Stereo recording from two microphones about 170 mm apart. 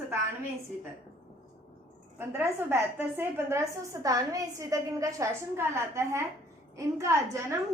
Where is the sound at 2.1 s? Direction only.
15° right (ahead or behind).